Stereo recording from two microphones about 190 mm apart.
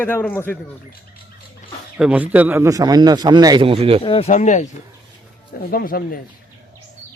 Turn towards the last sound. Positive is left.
turn(degrees=50)  # may be behind; listen again after turning